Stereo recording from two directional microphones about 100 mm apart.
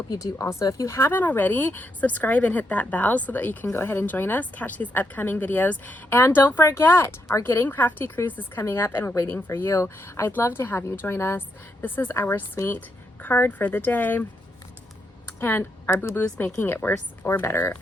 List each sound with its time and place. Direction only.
0.1 s speech: 35° left (ahead or behind); by 14.3 s 20° left (ahead or behind)
15.4 s a woman's voice: 25° left (ahead or behind)